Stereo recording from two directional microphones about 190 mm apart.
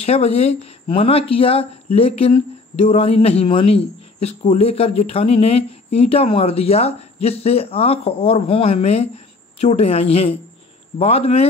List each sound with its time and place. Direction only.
0.0 s speech: 30° left (ahead or behind)